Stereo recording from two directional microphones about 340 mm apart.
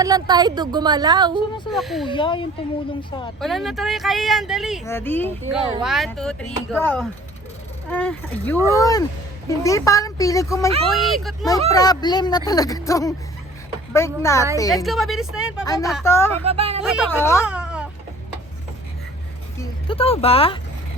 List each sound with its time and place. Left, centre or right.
0.0 s speech: centre
1.7 s speech: centre
2.0 s speech: centre
3.4 s speech: centre
8.5 s speech: centre
8.8 s speech: centre
11.7 s speech: centre
15.6 s speech: centre
16.4 s speech: centre
16.8 s speech: centre
17.4 s a sound: centre
19.9 s speech: centre